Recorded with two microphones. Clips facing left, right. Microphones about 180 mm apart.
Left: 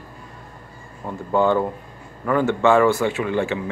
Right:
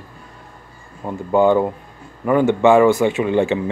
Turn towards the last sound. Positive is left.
turn(degrees=-20)  # may be behind; listen again after turning